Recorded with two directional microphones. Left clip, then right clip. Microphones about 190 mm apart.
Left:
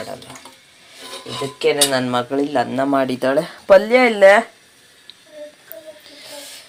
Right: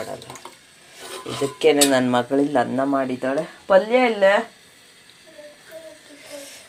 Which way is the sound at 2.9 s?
25° left (ahead or behind).